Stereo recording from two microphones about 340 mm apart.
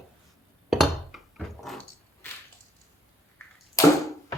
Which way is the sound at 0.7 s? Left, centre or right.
Centre.